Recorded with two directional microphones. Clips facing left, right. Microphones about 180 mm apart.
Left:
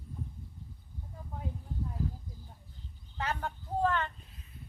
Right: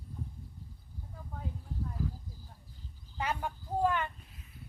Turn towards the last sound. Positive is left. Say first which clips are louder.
# even
turn(degrees=-10)  # may be behind; listen again after turning